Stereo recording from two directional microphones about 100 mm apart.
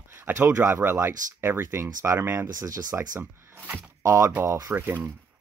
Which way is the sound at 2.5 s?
35° right (ahead or behind).